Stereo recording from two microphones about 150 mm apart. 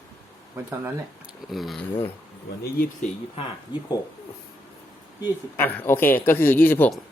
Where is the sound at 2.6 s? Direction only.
80° left.